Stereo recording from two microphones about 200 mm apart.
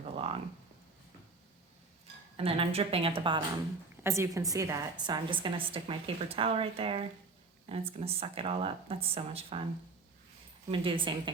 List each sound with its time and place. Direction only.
0.2 s a sound: 30° right (ahead or behind)
2.3 s speech: 30° right (ahead or behind)
4.0 s a woman's voice: 15° right (ahead or behind); by 9.6 s 30° right (ahead or behind)
10.7 s speech: 25° right (ahead or behind)